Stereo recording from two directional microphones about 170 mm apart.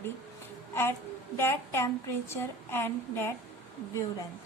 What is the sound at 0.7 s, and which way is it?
A woman's voice, 15° left (ahead or behind).